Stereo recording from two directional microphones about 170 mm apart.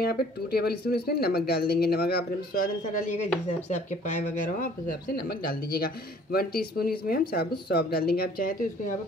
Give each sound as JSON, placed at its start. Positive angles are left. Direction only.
{"t": 0.0, "sound": "speech", "side_deg": 70}
{"t": 6.3, "sound": "speech", "side_deg": 65}